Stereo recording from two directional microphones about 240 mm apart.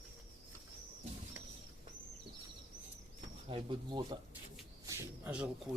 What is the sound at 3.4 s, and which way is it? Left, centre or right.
Speech, right.